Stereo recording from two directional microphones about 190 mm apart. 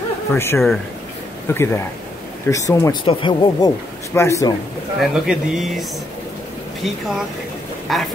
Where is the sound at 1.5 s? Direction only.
10° left (ahead or behind).